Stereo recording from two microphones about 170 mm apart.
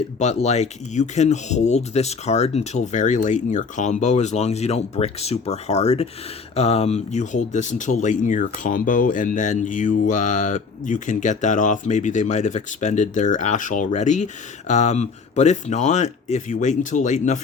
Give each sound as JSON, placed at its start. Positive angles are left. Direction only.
{"t": 0.2, "sound": "speech", "side_deg": 40}